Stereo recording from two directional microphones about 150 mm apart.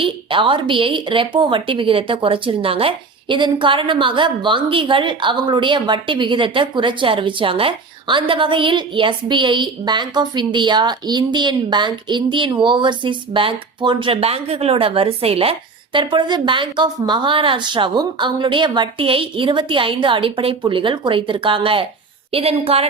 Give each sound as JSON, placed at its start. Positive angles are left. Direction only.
{"t": 0.0, "sound": "speech", "side_deg": -35}